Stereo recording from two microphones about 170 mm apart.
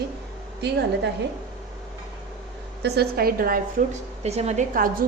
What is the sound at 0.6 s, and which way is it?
Speech, 80° right.